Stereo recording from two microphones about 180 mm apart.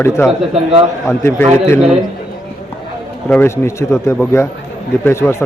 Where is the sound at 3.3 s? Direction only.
15° left (ahead or behind).